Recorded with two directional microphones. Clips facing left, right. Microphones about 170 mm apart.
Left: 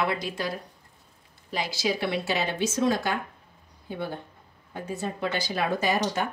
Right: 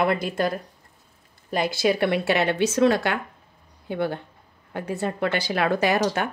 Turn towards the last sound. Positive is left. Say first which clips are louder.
# right 4 dB
turn(degrees=-65)  # may be behind; listen again after turning